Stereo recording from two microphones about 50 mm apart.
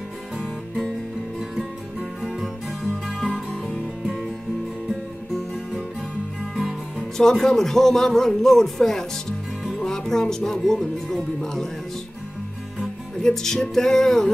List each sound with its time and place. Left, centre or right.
2.3 s music: centre
3.6 s music: right
4.8 s music: centre
7.0 s speech: centre
12.7 s music: centre